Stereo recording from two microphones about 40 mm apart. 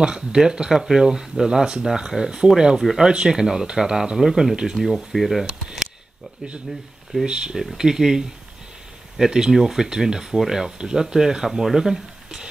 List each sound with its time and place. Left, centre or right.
0.0 s speech: centre
2.8 s speech: centre
3.1 s speech: centre
4.8 s speech: centre
5.4 s speech: right
7.2 s speech: right